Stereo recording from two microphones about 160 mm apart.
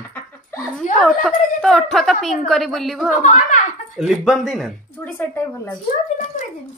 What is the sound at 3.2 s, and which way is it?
Speech, 50° left (ahead or behind).